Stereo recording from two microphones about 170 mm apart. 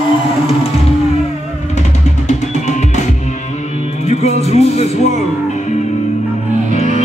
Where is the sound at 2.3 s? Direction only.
45° left (ahead or behind).